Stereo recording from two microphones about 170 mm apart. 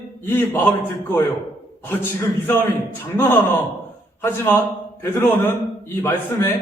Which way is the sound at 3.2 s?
15° left (ahead or behind).